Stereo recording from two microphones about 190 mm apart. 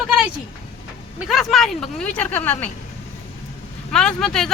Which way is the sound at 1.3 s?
Centre (ahead or behind).